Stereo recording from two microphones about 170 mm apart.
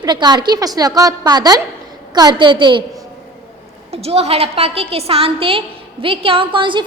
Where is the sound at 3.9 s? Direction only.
35° right (ahead or behind).